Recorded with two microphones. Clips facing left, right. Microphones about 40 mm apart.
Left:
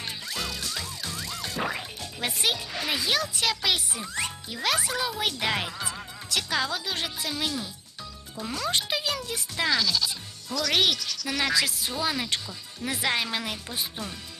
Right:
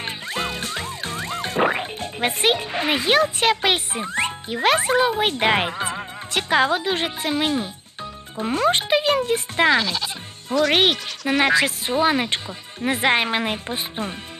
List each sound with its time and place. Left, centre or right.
0.0 s music: right
8.4 s speech: right